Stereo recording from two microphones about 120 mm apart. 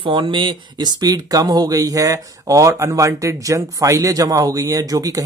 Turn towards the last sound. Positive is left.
turn(degrees=-30)  # may be behind; listen again after turning